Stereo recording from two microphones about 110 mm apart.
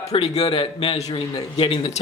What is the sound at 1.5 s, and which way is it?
Speech, 50° left (ahead or behind).